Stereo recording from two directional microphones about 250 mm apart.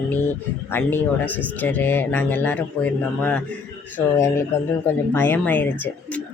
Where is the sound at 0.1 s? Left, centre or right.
Centre.